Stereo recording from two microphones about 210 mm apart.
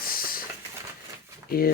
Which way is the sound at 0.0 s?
45° left (ahead or behind).